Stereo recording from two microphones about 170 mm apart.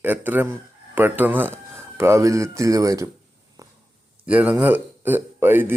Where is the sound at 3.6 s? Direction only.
20° right (ahead or behind).